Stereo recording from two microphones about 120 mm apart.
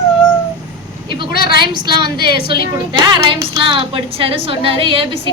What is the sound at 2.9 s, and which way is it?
A woman's voice, 40° right (ahead or behind).